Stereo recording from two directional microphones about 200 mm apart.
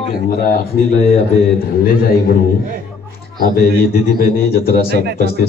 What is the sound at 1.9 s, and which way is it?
Speech, 50° left (ahead or behind).